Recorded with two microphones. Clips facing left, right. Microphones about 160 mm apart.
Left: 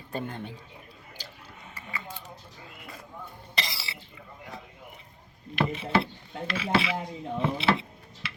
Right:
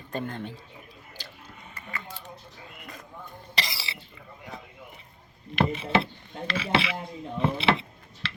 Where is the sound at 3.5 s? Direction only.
75° right (ahead or behind).